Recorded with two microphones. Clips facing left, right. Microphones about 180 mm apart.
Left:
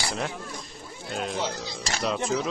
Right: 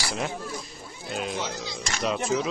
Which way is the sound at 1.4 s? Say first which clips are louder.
Left 2 dB; 35° left (ahead or behind).